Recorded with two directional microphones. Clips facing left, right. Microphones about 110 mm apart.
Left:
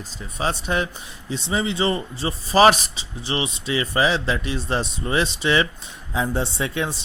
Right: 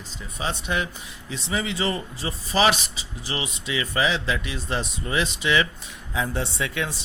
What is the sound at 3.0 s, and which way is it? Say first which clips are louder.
Speech: left 5 dB; 30° left (ahead or behind).